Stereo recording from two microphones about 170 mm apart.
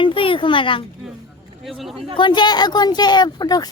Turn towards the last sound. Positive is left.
turn(degrees=25)  # may be behind; listen again after turning